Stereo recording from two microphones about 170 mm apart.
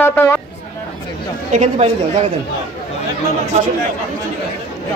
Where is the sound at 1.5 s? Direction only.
40° right (ahead or behind).